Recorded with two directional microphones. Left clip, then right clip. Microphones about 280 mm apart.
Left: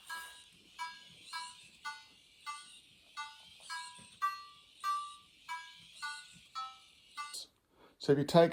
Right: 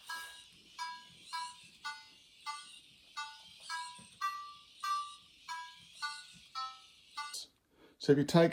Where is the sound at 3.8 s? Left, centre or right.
Centre.